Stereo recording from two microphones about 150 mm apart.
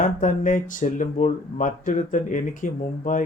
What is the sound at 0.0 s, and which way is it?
Speech, 60° left (ahead or behind).